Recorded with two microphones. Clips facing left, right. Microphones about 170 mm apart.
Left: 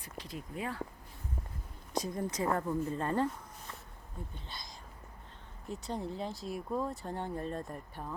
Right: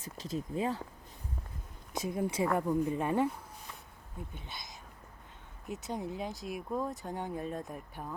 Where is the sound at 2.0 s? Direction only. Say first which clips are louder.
Right 2 dB; 5° right (ahead or behind).